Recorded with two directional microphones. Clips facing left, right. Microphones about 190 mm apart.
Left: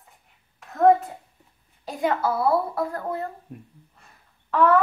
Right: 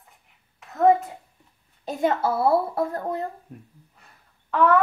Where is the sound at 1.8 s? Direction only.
25° right (ahead or behind).